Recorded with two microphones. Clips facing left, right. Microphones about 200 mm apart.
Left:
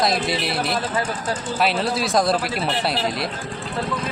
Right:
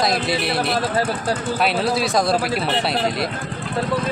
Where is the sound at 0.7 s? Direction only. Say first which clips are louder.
Right 3 dB; 40° right (ahead or behind).